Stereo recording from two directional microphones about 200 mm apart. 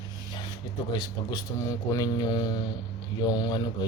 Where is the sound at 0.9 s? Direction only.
20° left (ahead or behind).